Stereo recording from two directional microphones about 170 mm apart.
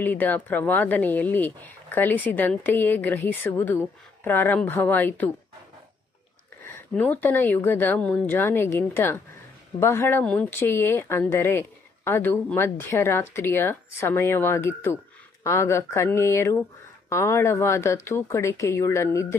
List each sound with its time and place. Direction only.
0.0 s speech: 10° left (ahead or behind)
6.6 s speech: 10° left (ahead or behind)